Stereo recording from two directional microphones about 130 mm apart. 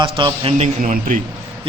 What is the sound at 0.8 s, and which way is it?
Speech, 90° right.